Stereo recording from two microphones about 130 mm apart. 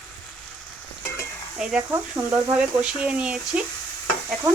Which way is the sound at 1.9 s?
20° right (ahead or behind).